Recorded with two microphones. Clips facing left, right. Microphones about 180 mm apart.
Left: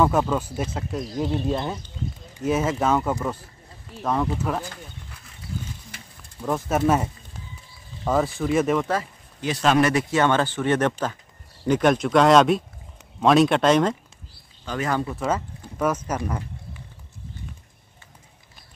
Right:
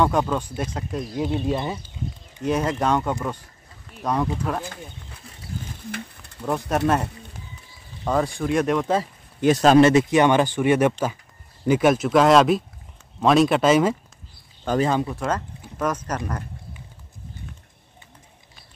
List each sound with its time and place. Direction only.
0.0 s speech: 5° left (ahead or behind)
2.4 s speech: 5° left (ahead or behind)
5.9 s a sound: 55° right (ahead or behind)
6.4 s speech: 5° left (ahead or behind)
9.4 s speech: 45° right (ahead or behind)
9.8 s speech: 25° right (ahead or behind)
15.1 s speech: 5° left (ahead or behind)